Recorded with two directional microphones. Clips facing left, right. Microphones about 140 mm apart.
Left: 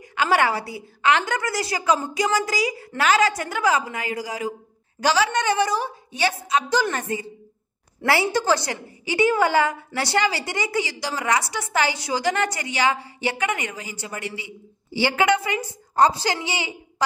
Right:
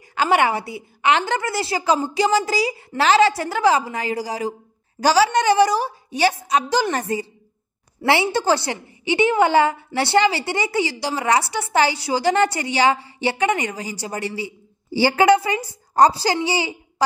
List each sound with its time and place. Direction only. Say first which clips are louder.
0.3 s a woman's voice: right 2 dB; 20° right (ahead or behind)